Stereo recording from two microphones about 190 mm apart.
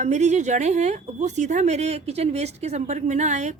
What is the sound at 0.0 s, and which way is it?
Speech, 40° right (ahead or behind).